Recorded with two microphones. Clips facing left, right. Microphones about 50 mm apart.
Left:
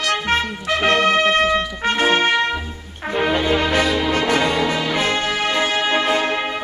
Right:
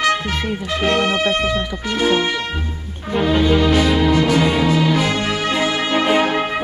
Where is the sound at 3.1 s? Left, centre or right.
Left.